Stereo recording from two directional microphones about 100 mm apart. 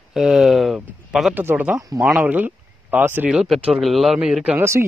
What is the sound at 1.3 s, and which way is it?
Speech, 20° right (ahead or behind).